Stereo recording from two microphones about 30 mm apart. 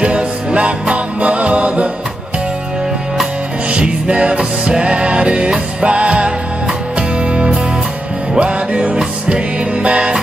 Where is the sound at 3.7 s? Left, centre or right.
Right.